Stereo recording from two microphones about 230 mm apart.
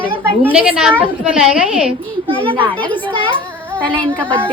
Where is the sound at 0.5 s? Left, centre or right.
Centre.